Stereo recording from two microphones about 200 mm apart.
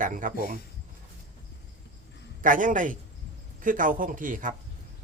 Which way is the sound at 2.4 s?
40° right (ahead or behind).